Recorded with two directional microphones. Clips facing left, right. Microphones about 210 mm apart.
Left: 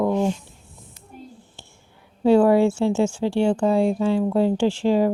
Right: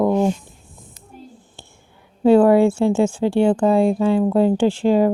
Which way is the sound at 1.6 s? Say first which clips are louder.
Right 3 dB; 55° right (ahead or behind).